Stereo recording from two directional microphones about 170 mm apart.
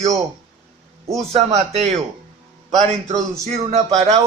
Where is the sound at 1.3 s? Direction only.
40° right (ahead or behind).